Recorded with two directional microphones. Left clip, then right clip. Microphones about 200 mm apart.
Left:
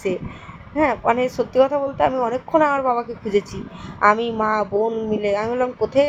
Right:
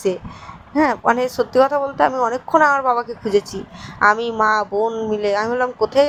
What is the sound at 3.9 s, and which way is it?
Speech, 25° right (ahead or behind).